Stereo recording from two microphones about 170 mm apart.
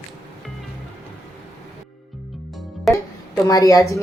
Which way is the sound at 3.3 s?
20° left (ahead or behind).